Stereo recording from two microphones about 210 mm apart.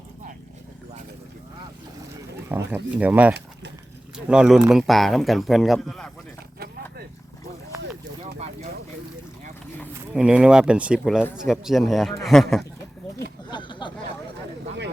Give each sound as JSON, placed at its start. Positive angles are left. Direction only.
{"t": 2.5, "sound": "speech", "side_deg": -10}
{"t": 10.2, "sound": "speech", "side_deg": -5}
{"t": 13.5, "sound": "a sound", "side_deg": 20}